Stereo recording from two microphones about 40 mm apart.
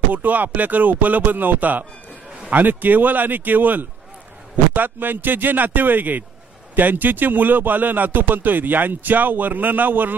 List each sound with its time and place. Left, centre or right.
0.1 s speech: right